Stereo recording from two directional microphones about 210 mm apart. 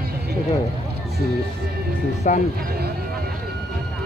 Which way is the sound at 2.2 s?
35° left (ahead or behind).